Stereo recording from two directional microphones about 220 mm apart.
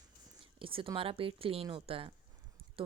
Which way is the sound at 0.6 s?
25° right (ahead or behind).